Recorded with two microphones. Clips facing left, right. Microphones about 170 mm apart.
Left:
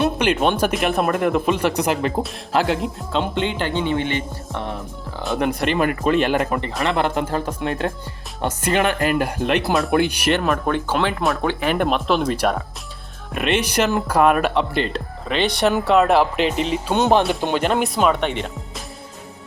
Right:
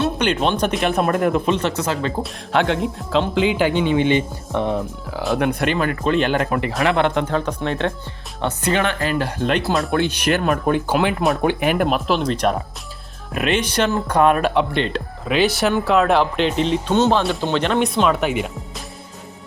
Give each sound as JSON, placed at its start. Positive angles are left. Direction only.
{"t": 0.2, "sound": "speech", "side_deg": 5}
{"t": 2.2, "sound": "speech", "side_deg": 0}
{"t": 5.1, "sound": "speech", "side_deg": 0}
{"t": 9.1, "sound": "speech", "side_deg": 10}
{"t": 10.3, "sound": "speech", "side_deg": -5}
{"t": 13.6, "sound": "speech", "side_deg": 10}
{"t": 17.0, "sound": "speech", "side_deg": 15}